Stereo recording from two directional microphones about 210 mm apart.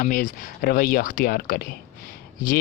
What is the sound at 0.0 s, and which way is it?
Speech, 40° left (ahead or behind).